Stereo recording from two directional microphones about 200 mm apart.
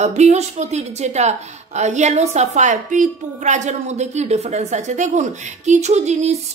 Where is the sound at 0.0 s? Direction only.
35° right (ahead or behind).